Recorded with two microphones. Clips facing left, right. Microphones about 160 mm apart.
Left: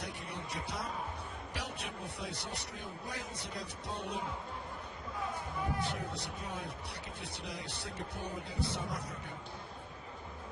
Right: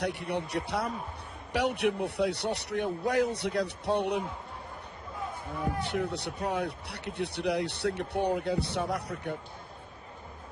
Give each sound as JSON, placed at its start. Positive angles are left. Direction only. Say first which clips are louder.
{"t": 0.0, "sound": "speech", "louder": "right 11 dB", "side_deg": -70}
{"t": 5.8, "sound": "speech", "louder": "right 7 dB", "side_deg": -70}